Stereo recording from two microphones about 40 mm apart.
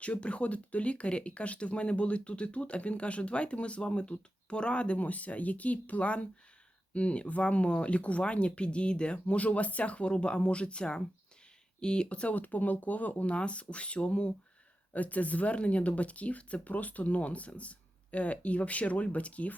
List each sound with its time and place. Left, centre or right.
0.0 s speech: left
12.4 s speech: left
13.3 s speech: left
14.9 s speech: left